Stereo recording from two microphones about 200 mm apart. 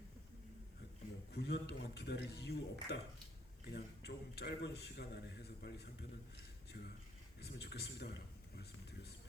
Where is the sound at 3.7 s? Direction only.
55° left (ahead or behind).